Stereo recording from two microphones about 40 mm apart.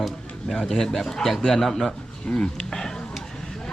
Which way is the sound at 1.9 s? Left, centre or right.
Left.